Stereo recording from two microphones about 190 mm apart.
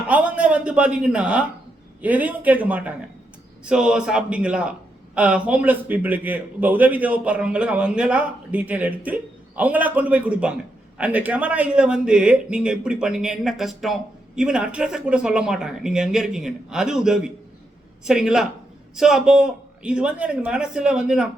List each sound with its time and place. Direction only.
0.1 s a man's voice: 5° right (ahead or behind)